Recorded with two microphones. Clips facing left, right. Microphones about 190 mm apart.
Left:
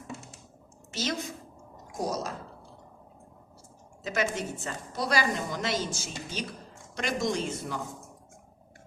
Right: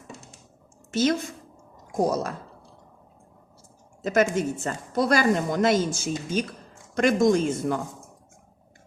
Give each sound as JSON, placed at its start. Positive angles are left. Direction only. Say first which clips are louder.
{"t": 0.9, "sound": "a woman's voice", "louder": "right 9 dB", "side_deg": -50}
{"t": 4.0, "sound": "speech", "louder": "right 8 dB", "side_deg": -50}